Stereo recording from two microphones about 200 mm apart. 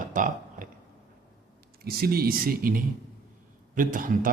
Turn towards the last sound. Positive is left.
turn(degrees=-45)  # may be behind; listen again after turning